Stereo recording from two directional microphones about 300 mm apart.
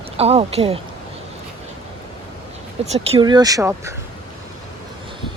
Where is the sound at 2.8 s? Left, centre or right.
Right.